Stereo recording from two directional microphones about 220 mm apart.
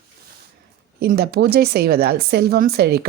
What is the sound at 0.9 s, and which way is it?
Speech, 45° right (ahead or behind).